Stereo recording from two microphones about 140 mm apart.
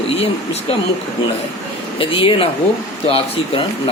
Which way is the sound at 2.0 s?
40° left (ahead or behind).